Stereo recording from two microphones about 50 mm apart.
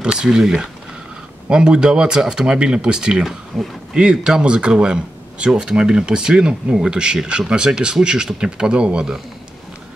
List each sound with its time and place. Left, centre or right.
0.0 s speech: centre